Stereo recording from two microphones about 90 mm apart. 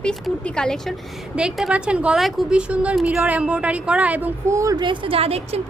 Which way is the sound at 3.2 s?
15° right (ahead or behind).